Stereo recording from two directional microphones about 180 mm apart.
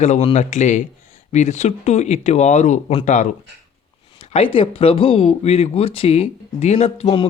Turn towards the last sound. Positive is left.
turn(degrees=30)  # may be behind; listen again after turning